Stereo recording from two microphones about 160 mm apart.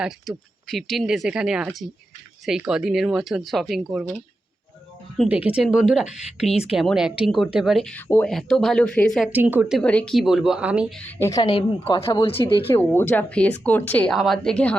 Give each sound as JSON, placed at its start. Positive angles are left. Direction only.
{"t": 0.0, "sound": "speech", "side_deg": 0}
{"t": 5.3, "sound": "speech", "side_deg": -10}
{"t": 8.0, "sound": "speech", "side_deg": 15}
{"t": 8.3, "sound": "speech", "side_deg": 5}
{"t": 9.3, "sound": "speech", "side_deg": -10}
{"t": 9.8, "sound": "speech", "side_deg": 10}
{"t": 11.2, "sound": "a woman's voice", "side_deg": 20}
{"t": 11.5, "sound": "speech", "side_deg": 35}
{"t": 12.6, "sound": "speech", "side_deg": 15}